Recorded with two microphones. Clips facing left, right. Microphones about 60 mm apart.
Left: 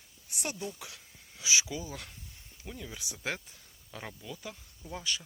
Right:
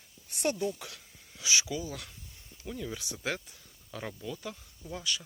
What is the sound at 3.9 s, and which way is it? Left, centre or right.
Speech, centre.